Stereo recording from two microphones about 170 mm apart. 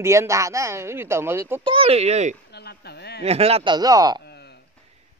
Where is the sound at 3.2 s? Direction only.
35° right (ahead or behind); by 4.2 s 20° right (ahead or behind).